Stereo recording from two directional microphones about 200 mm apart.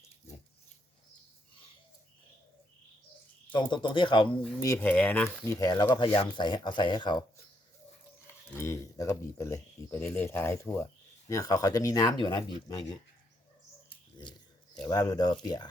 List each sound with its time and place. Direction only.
3.5 s speech: 25° left (ahead or behind)
4.6 s speech: 10° left (ahead or behind)
5.5 s speech: 20° left (ahead or behind)
8.5 s speech: 15° left (ahead or behind)
14.8 s speech: 15° left (ahead or behind)